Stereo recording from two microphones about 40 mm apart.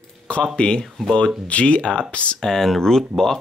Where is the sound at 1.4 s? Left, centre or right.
Left.